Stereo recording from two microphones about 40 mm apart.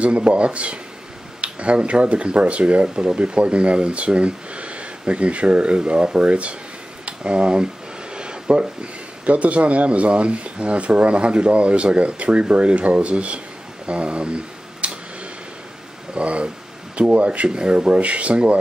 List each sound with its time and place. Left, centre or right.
0.0 s speech: right
16.2 s speech: right
17.5 s speech: right